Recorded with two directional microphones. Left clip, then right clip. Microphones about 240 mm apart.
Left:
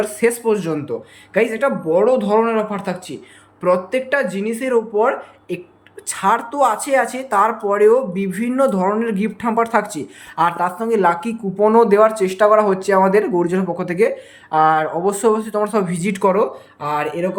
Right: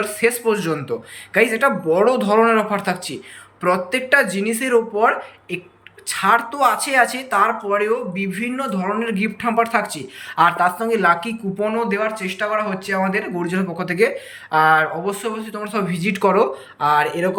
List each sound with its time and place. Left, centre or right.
0.0 s speech: centre